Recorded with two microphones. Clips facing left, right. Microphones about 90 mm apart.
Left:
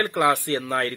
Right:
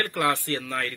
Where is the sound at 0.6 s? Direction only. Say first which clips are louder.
Left 5 dB; 35° left (ahead or behind).